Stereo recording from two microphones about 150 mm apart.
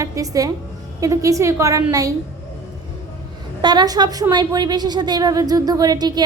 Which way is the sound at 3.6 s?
30° right (ahead or behind).